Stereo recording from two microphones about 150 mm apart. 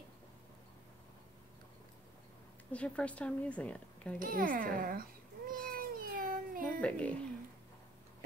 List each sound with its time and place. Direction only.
2.7 s a woman's voice: 10° left (ahead or behind)
4.2 s speech: 70° right (ahead or behind)
5.5 s cat: 70° right (ahead or behind)
6.8 s a woman's voice: 10° left (ahead or behind)